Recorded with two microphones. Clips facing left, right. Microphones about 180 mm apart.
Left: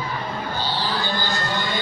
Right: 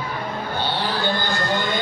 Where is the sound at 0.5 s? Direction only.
60° right (ahead or behind).